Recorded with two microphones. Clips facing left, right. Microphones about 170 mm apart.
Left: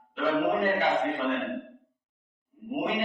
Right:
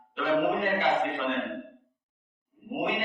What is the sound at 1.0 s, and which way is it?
Speech, 40° left (ahead or behind).